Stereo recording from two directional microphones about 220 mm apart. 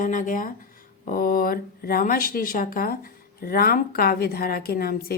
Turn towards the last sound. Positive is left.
turn(degrees=45)  # may be behind; listen again after turning